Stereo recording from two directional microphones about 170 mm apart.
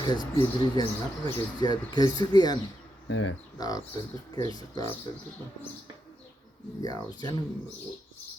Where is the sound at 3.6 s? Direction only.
20° left (ahead or behind).